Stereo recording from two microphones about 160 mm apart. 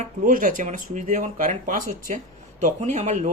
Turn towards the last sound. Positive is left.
turn(degrees=-50)  # may be behind; listen again after turning